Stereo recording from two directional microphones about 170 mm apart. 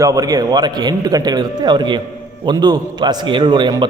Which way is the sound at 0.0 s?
20° right (ahead or behind).